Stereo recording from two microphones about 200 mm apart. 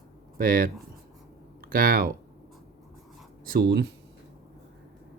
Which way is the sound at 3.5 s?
55° right (ahead or behind).